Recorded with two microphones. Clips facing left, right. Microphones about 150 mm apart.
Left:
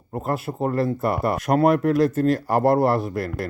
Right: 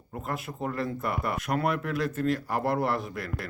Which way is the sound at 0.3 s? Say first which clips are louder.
Left 9 dB; 40° left (ahead or behind).